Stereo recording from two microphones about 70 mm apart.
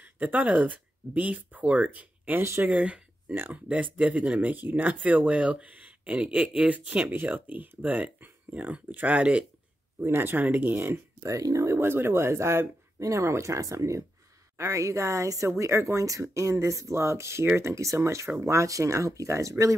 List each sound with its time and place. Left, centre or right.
0.0 s speech: right
2.8 s a sound: centre
3.5 s speech: centre
9.9 s speech: right
11.2 s speech: right
11.8 s speech: right